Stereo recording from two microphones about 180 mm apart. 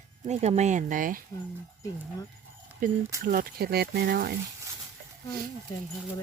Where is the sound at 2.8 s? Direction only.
50° right (ahead or behind).